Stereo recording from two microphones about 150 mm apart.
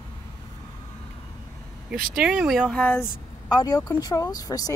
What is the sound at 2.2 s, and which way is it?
Speech, 5° right (ahead or behind).